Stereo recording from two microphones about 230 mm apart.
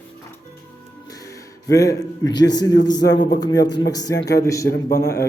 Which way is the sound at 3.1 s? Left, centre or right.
Left.